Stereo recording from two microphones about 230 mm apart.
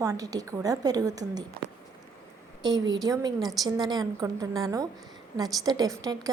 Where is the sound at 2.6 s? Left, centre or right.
Centre.